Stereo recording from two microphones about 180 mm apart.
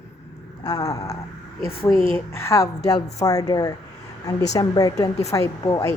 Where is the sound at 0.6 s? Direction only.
20° left (ahead or behind).